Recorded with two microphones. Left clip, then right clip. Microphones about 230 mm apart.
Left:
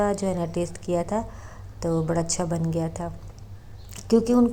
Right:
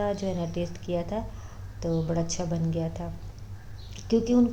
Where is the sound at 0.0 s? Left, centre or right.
Centre.